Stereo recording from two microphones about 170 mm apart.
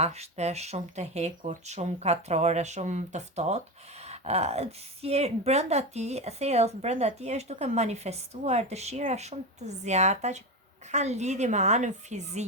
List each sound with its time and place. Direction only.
0.0 s a woman's voice: 40° right (ahead or behind)